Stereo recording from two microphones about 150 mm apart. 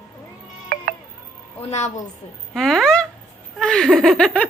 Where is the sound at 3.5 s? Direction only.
5° left (ahead or behind).